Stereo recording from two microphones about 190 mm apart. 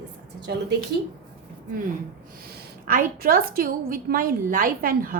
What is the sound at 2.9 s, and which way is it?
A woman's voice, 50° right (ahead or behind).